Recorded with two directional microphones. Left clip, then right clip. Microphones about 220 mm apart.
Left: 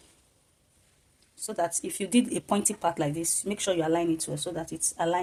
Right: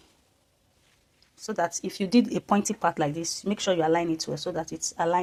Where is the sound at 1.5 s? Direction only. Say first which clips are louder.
Right 2 dB; 20° right (ahead or behind).